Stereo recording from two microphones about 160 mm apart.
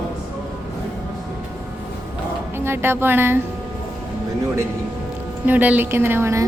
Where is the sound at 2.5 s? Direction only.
15° right (ahead or behind).